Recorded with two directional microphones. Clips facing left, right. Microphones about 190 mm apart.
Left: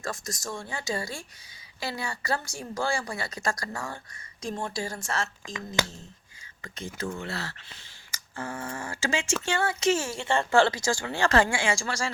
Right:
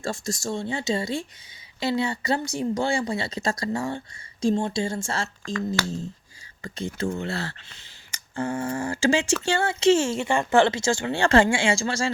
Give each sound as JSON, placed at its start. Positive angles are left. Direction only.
{"t": 0.0, "sound": "speech", "side_deg": -30}
{"t": 6.6, "sound": "speech", "side_deg": -35}